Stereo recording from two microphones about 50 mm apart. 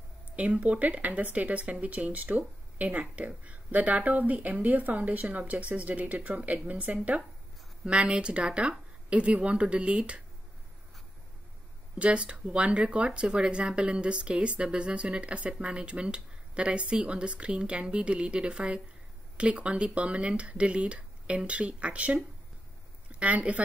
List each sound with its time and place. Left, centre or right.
0.4 s speech: right
12.0 s speech: right